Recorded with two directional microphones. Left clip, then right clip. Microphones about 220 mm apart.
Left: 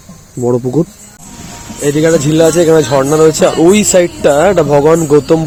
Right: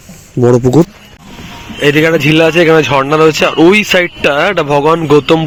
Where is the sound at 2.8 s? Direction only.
10° right (ahead or behind).